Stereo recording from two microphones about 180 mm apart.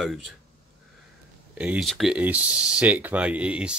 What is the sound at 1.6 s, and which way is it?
Speech, 5° right (ahead or behind).